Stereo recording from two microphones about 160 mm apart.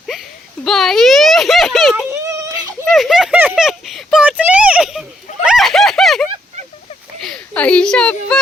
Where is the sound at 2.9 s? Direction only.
Centre (ahead or behind).